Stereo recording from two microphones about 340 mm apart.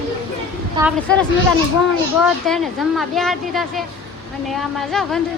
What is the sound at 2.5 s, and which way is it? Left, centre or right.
A woman's voice, centre.